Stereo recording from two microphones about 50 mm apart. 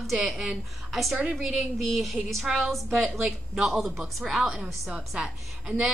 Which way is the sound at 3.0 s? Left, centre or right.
Centre.